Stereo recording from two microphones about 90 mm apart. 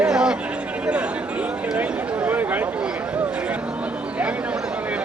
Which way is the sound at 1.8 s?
20° right (ahead or behind).